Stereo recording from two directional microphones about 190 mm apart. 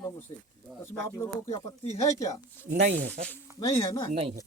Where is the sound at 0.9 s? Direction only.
15° left (ahead or behind).